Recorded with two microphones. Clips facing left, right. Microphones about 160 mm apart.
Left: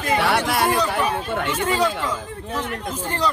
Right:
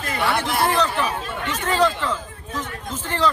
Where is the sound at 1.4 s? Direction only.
10° left (ahead or behind).